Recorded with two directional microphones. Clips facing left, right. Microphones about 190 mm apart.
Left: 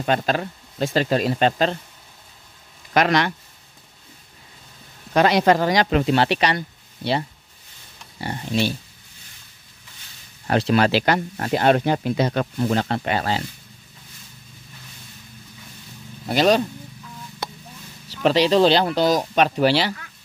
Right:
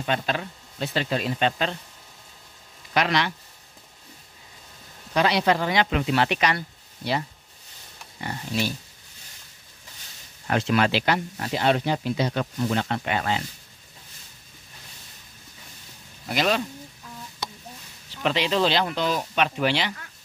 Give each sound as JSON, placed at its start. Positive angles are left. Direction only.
{"t": 0.0, "sound": "speech", "side_deg": 45}
{"t": 2.9, "sound": "speech", "side_deg": 50}
{"t": 5.1, "sound": "speech", "side_deg": 50}
{"t": 10.4, "sound": "speech", "side_deg": 35}
{"t": 16.3, "sound": "speech", "side_deg": 35}
{"t": 17.4, "sound": "a sound", "side_deg": 60}
{"t": 18.2, "sound": "speech", "side_deg": 35}